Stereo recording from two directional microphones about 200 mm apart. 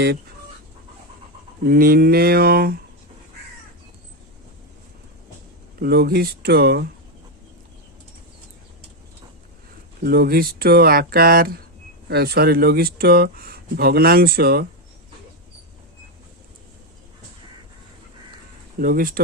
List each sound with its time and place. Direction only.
1.6 s speech: 50° right (ahead or behind)
5.8 s speech: 50° right (ahead or behind)
10.0 s speech: 50° right (ahead or behind)
18.8 s speech: 45° right (ahead or behind)